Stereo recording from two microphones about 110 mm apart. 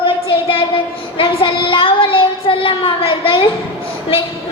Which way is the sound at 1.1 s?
50° left (ahead or behind).